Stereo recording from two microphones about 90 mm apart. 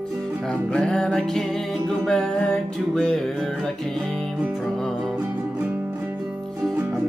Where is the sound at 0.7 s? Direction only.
10° left (ahead or behind).